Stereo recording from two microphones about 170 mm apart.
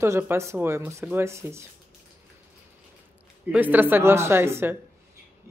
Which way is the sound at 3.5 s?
10° right (ahead or behind).